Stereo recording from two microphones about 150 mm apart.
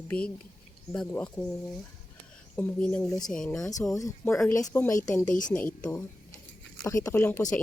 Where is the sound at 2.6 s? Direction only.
10° left (ahead or behind).